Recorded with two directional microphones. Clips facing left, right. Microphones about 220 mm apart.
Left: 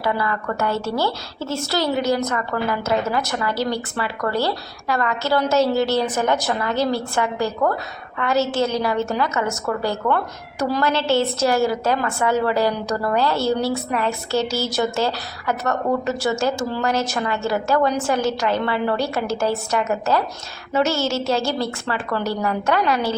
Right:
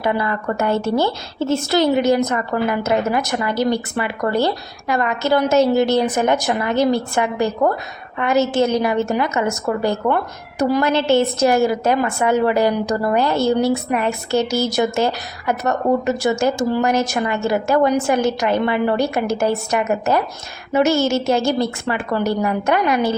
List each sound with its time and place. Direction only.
0.0 s a woman's voice: 20° right (ahead or behind)